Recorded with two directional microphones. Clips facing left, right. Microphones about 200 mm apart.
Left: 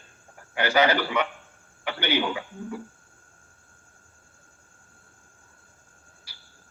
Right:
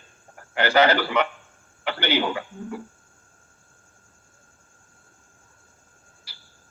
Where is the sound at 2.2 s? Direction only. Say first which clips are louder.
Right 2 dB; 55° right (ahead or behind).